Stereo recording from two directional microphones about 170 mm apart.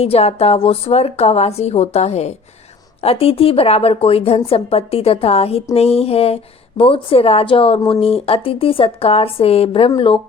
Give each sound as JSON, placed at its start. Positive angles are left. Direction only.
{"t": 0.0, "sound": "a woman's voice", "side_deg": 35}